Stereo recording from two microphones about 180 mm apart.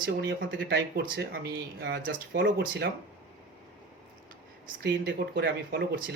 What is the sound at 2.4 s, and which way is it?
Speech, 70° right (ahead or behind).